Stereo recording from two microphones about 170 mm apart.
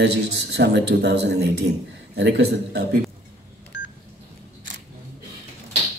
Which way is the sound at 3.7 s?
90° left.